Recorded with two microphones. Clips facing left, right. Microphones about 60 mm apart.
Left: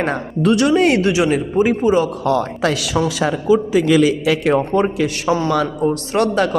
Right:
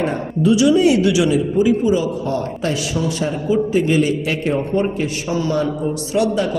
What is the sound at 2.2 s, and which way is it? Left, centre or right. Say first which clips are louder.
A man's voice: left 4 dB; left.